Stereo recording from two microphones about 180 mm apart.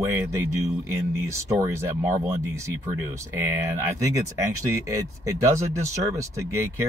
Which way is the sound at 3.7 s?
15° right (ahead or behind).